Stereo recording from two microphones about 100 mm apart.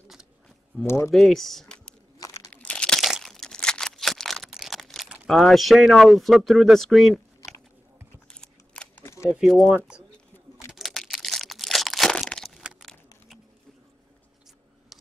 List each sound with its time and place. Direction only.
0.8 s speech: 25° left (ahead or behind)
1.1 s speech: 5° left (ahead or behind)
2.1 s crumpling: 30° left (ahead or behind)
2.5 s crumpling: 10° left (ahead or behind)
3.0 s a sound: centre (ahead or behind)
5.3 s speech: centre (ahead or behind)
8.3 s scissors: 10° left (ahead or behind)
9.0 s a sound: 25° left (ahead or behind)
9.4 s speech: centre (ahead or behind)
10.7 s crumpling: centre (ahead or behind)